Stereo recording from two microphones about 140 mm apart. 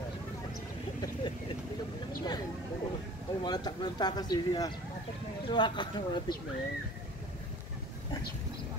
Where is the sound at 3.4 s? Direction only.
30° left (ahead or behind).